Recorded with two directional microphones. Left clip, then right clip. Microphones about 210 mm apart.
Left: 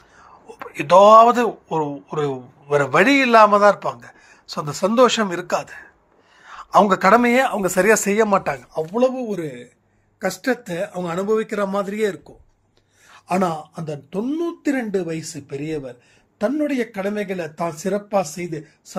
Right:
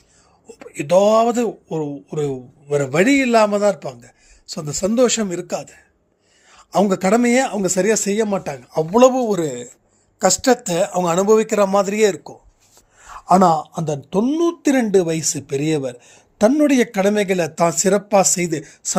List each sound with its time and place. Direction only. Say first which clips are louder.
0.4 s a man's voice: left 1 dB; 55° right (ahead or behind)
9.2 s a man's voice: right 7 dB; 25° right (ahead or behind)
13.4 s a man's voice: right 8 dB; 25° right (ahead or behind); by 18.9 s 50° right (ahead or behind)